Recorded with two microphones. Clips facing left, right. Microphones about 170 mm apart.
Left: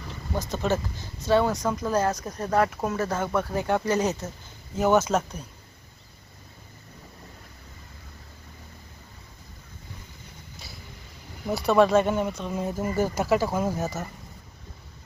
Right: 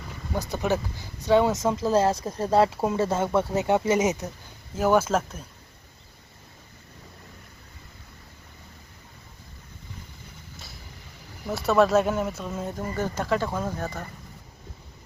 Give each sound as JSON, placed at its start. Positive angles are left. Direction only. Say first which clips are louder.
{"t": 0.5, "sound": "speech", "louder": "even", "side_deg": -15}
{"t": 4.8, "sound": "speech", "louder": "even", "side_deg": -10}
{"t": 11.4, "sound": "speech", "louder": "left 1 dB", "side_deg": 0}